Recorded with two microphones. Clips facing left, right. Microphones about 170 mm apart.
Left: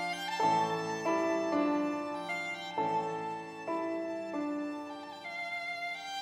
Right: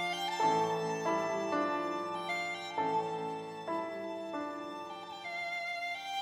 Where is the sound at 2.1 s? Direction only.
20° right (ahead or behind).